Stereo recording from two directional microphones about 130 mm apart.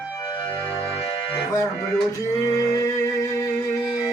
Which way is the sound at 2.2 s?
25° left (ahead or behind).